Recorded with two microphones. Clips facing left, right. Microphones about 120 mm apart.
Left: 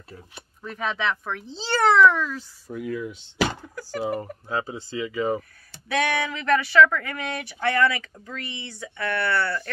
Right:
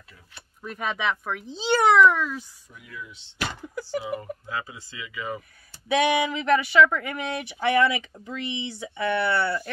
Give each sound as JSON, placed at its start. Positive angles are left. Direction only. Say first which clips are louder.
{"t": 0.6, "sound": "a child's voice", "louder": "left 1 dB", "side_deg": -10}
{"t": 2.7, "sound": "speech", "louder": "left 13 dB", "side_deg": 50}
{"t": 5.9, "sound": "speech", "louder": "right 3 dB", "side_deg": -15}